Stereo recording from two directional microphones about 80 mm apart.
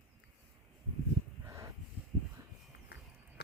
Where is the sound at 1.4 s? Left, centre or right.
Right.